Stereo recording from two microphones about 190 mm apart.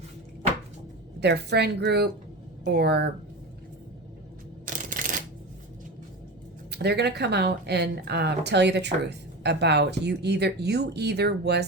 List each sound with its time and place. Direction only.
1.2 s speech: 60° right (ahead or behind)
4.6 s shuffling cards: 45° right (ahead or behind)
6.7 s speech: 60° right (ahead or behind)